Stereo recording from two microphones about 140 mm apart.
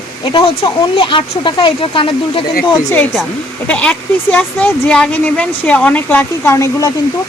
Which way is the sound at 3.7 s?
10° left (ahead or behind).